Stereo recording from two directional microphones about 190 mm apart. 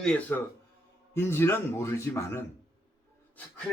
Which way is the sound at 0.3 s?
10° left (ahead or behind).